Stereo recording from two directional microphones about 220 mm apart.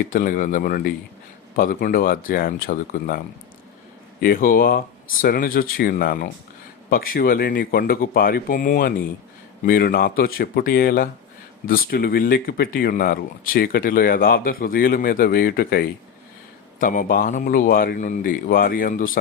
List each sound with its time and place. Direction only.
0.0 s speech: 40° left (ahead or behind)
4.2 s speech: 40° left (ahead or behind)